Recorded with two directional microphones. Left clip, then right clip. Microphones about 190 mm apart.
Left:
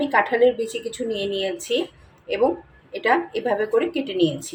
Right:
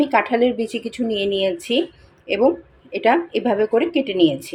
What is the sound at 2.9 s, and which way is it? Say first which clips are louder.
Speech: right 3 dB; 35° right (ahead or behind).